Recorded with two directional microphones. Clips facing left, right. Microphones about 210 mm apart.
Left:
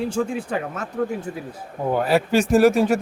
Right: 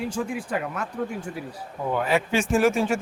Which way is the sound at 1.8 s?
35° left (ahead or behind).